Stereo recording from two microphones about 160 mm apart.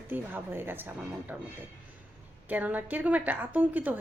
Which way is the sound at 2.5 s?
10° right (ahead or behind).